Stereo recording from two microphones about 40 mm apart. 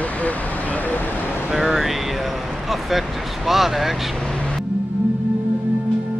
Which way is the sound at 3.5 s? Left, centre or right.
Centre.